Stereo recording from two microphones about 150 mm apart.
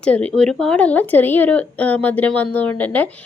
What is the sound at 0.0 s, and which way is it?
A woman's voice, 10° left (ahead or behind).